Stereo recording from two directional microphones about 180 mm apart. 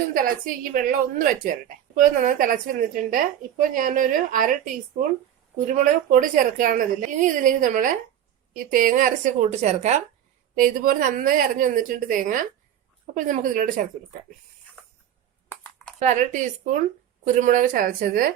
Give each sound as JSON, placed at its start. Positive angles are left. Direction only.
{"t": 0.1, "sound": "speech", "side_deg": -50}
{"t": 10.5, "sound": "speech", "side_deg": -50}
{"t": 16.0, "sound": "speech", "side_deg": -40}